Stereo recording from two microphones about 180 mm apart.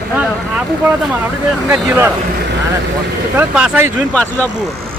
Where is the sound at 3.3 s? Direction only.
10° right (ahead or behind).